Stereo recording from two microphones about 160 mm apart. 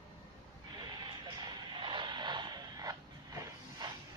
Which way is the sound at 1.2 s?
30° right (ahead or behind).